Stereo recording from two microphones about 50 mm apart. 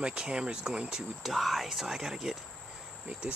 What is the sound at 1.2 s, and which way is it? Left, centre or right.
Speech, centre.